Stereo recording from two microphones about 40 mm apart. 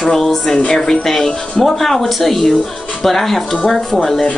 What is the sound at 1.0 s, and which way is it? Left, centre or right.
Speech, centre.